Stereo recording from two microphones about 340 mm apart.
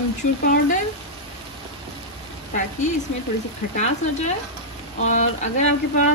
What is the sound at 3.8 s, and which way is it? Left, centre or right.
A woman's voice, centre.